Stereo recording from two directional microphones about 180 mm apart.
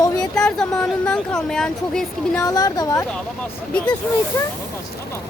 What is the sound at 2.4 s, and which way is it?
Speech, 20° left (ahead or behind).